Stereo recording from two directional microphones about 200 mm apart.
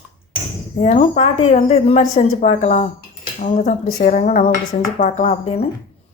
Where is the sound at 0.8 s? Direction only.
35° left (ahead or behind).